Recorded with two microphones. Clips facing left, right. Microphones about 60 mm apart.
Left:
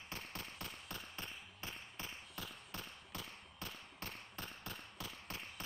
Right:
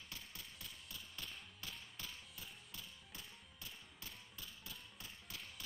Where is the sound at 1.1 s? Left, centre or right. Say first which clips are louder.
Left 3 dB; left.